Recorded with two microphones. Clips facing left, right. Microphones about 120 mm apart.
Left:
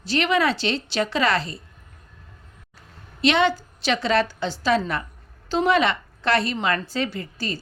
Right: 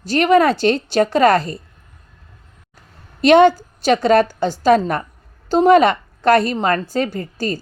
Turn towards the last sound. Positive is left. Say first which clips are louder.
# right 7 dB
turn(degrees=-45)  # may be behind; listen again after turning